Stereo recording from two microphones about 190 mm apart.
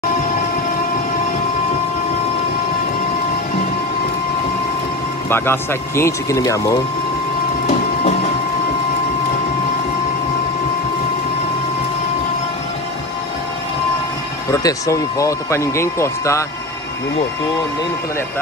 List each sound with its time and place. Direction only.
5.3 s speech: 10° left (ahead or behind)
14.5 s speech: 15° left (ahead or behind)